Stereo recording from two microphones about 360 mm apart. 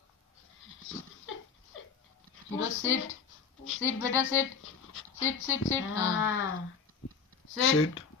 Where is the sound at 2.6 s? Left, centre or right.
Left.